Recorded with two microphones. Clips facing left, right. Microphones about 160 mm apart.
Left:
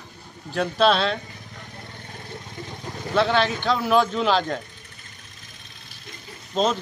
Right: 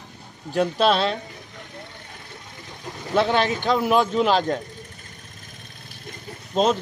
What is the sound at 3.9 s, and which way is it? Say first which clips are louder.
Speech: even; 5° right (ahead or behind).